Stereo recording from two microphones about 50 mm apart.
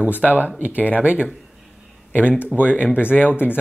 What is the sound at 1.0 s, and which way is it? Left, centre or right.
Speech, right.